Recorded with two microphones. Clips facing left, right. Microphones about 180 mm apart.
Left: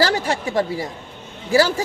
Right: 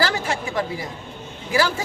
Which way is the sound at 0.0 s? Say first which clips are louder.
Left 4 dB; 35° left (ahead or behind).